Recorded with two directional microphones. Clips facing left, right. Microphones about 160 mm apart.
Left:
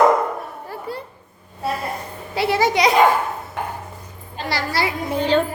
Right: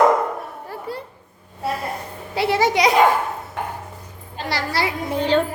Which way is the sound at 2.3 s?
20° right (ahead or behind).